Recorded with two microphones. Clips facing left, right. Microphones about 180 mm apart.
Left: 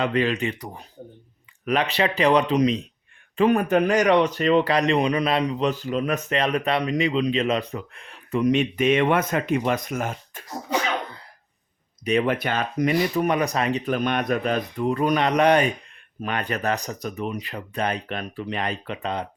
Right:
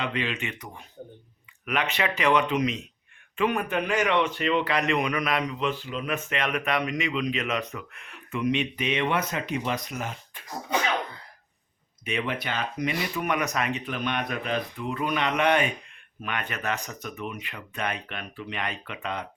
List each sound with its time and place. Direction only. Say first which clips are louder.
0.0 s speech: left 8 dB; 40° left (ahead or behind)
12.0 s speech: left 8 dB; 40° left (ahead or behind)